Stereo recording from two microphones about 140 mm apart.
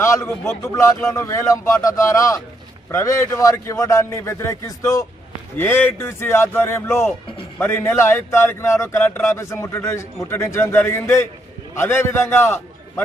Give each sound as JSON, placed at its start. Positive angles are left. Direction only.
{"t": 0.0, "sound": "a man's voice", "side_deg": 20}
{"t": 5.5, "sound": "a man's voice", "side_deg": 15}